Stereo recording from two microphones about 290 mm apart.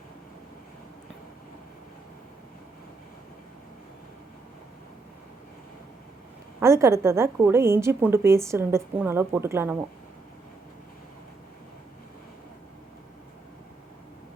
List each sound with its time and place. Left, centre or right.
6.6 s a woman's voice: centre